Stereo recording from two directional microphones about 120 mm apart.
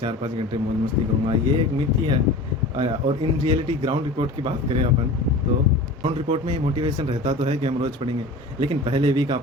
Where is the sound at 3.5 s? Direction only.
45° right (ahead or behind).